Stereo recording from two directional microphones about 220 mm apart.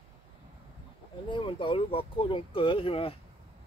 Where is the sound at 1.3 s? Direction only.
20° left (ahead or behind).